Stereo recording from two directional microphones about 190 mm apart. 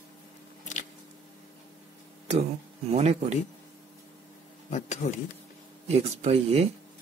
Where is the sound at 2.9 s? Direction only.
35° right (ahead or behind).